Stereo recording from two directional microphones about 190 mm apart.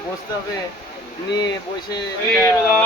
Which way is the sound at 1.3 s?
20° left (ahead or behind).